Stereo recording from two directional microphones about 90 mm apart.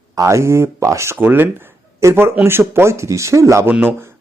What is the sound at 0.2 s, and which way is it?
Speech, 35° right (ahead or behind).